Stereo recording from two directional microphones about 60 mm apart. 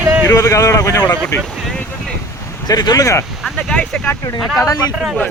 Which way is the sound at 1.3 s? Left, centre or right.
Left.